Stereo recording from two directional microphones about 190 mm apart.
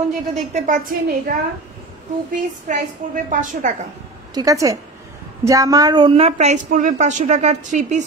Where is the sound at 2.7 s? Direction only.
45° right (ahead or behind).